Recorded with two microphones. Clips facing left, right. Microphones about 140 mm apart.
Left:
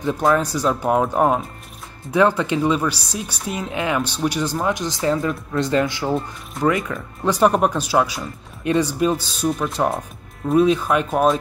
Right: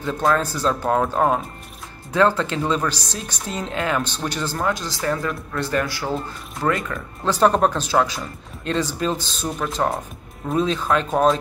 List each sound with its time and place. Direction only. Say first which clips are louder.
0.0 s speech: left 2 dB; 15° left (ahead or behind)